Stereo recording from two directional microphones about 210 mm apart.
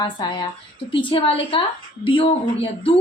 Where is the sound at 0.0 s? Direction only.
20° left (ahead or behind).